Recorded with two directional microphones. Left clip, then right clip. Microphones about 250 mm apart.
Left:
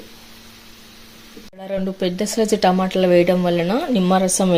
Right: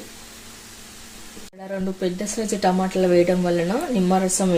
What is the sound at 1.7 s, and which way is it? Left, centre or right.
Speech, left.